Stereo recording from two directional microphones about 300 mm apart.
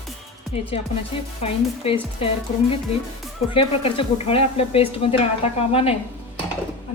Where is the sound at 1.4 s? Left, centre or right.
Centre.